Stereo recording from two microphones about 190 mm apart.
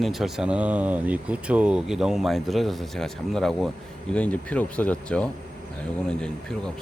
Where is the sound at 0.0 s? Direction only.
Centre (ahead or behind).